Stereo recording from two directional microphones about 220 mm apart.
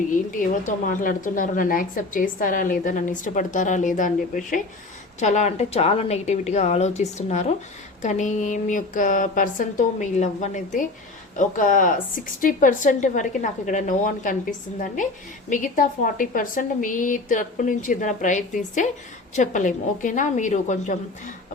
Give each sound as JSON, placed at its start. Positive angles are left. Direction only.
{"t": 0.1, "sound": "a woman's voice", "side_deg": 35}
{"t": 15.4, "sound": "a woman's voice", "side_deg": 35}